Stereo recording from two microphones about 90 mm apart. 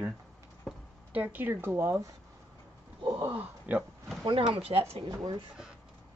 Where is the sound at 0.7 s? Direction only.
5° left (ahead or behind).